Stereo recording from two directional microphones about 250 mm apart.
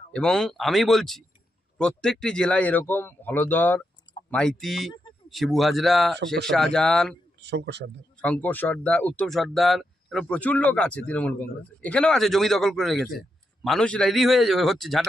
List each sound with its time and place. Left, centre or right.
0.1 s speech: centre
6.1 s speech: right
6.5 s speech: centre
7.4 s speech: right
8.2 s speech: centre